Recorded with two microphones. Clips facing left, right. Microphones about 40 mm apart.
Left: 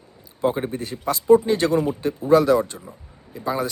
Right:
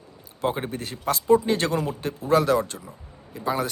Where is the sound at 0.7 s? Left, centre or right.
Right.